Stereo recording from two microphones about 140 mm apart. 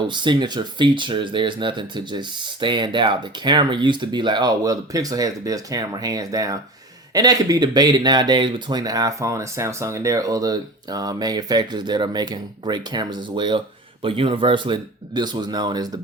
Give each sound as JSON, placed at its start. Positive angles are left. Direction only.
{"t": 0.0, "sound": "speech", "side_deg": -35}